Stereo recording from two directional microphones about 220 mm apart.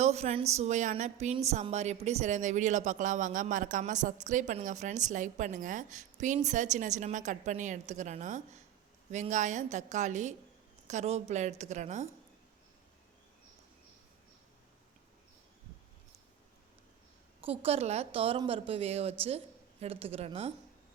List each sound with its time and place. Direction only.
0.0 s a woman's voice: 30° right (ahead or behind)
17.4 s a woman's voice: 25° right (ahead or behind)